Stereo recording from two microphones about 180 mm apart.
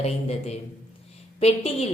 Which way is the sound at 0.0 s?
35° left (ahead or behind).